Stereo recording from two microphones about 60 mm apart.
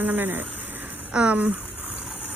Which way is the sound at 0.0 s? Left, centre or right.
Right.